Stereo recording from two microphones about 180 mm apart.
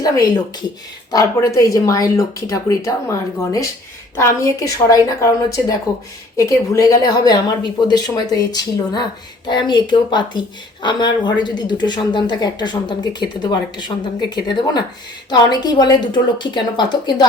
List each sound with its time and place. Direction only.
1.1 s a woman's voice: 20° left (ahead or behind)